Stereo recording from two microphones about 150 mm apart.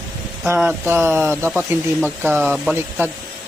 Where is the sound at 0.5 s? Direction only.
15° right (ahead or behind).